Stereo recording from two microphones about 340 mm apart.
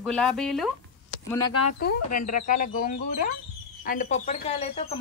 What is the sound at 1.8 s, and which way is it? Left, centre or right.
Speech, left.